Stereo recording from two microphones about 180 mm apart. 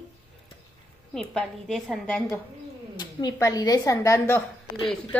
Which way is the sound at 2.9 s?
25° left (ahead or behind).